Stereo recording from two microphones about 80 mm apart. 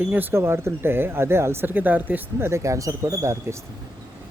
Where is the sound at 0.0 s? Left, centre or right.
Right.